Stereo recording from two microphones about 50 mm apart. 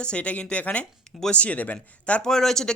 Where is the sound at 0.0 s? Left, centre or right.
Left.